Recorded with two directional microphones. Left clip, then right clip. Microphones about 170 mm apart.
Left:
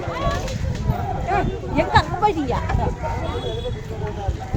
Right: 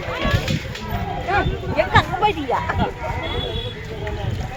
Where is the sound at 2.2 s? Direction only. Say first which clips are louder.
Right 1 dB; 30° right (ahead or behind).